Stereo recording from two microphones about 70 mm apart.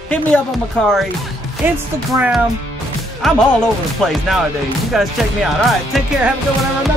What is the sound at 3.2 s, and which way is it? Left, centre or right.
Speech, centre.